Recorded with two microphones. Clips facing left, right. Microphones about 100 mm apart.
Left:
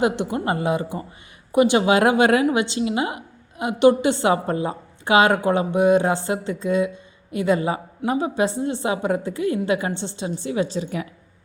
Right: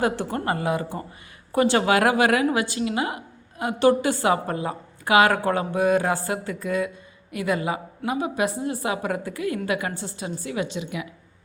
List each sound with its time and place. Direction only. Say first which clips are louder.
0.0 s a woman's voice: left 3 dB; 15° left (ahead or behind); by 11.1 s 40° left (ahead or behind)